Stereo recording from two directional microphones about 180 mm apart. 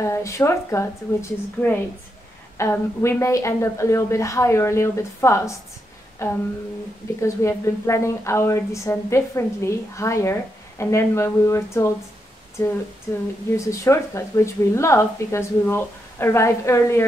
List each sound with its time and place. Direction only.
0.0 s speech: 15° left (ahead or behind)